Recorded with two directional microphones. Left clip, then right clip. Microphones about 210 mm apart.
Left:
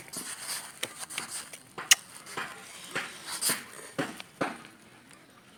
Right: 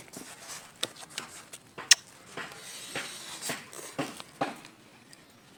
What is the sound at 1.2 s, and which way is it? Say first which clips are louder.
Tick-tock: left 3 dB; 10° right (ahead or behind).